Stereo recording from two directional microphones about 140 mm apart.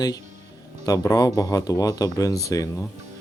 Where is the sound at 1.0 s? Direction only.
25° left (ahead or behind).